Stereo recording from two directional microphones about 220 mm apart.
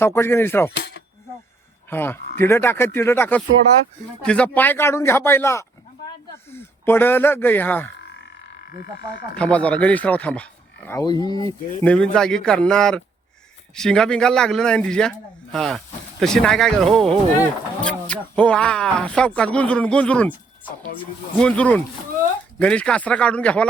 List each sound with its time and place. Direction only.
0.0 s speech: 10° left (ahead or behind)
0.8 s a sound: 55° left (ahead or behind)
1.9 s speech: 10° left (ahead or behind)
8.0 s frog: 50° left (ahead or behind)
9.4 s speech: 5° left (ahead or behind)
11.0 s speech: 20° left (ahead or behind)
21.3 s speech: 5° left (ahead or behind)